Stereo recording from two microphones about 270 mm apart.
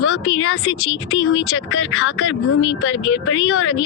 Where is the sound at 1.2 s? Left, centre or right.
Left.